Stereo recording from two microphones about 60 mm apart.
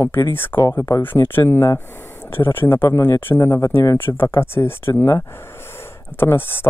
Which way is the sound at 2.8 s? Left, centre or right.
Left.